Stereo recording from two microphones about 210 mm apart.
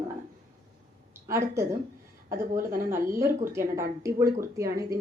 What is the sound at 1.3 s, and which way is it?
A woman's voice, 15° right (ahead or behind).